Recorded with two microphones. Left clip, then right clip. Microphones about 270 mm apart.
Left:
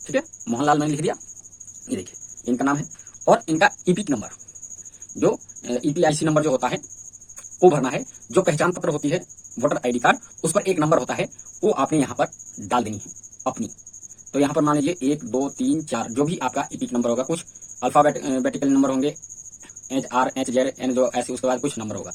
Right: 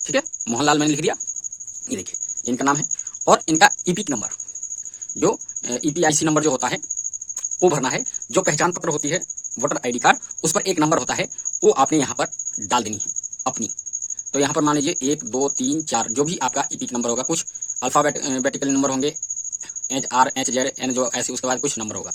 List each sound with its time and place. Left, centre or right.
0.0 s speech: right
2.5 s speech: right
14.3 s speech: right